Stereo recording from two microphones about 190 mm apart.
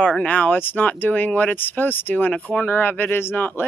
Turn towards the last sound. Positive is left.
turn(degrees=10)  # may be behind; listen again after turning